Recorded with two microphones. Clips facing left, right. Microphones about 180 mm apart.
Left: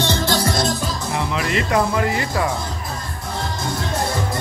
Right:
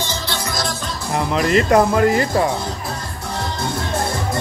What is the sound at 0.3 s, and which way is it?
Music, 30° left (ahead or behind).